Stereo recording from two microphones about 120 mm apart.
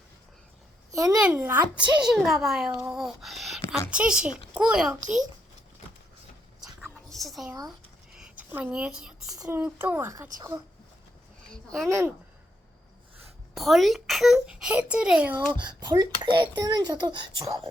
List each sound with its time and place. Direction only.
0.9 s a woman's voice: 30° right (ahead or behind)
1.2 s a child's voice: 10° right (ahead or behind)
2.1 s a child's voice: centre (ahead or behind)
2.9 s a sound: centre (ahead or behind)
3.8 s a child's voice: 10° right (ahead or behind)
6.6 s whispering: centre (ahead or behind)
8.1 s speech: 10° right (ahead or behind)
9.5 s speech: 15° right (ahead or behind)
11.4 s speech: 5° left (ahead or behind)
11.9 s speech: 20° right (ahead or behind)
13.5 s a child's voice: centre (ahead or behind)
15.8 s a child's voice: 35° right (ahead or behind)